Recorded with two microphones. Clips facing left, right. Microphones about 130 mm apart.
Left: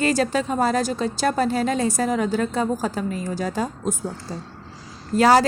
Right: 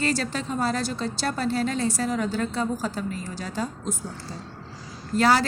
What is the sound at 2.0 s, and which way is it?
Speech, 50° left (ahead or behind).